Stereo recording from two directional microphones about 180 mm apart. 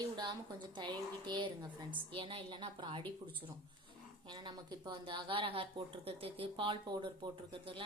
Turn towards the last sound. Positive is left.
turn(degrees=-30)  # may be behind; listen again after turning